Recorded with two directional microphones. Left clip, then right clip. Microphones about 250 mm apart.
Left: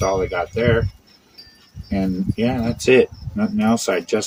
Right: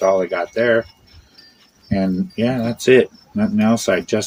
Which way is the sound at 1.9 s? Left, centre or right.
Right.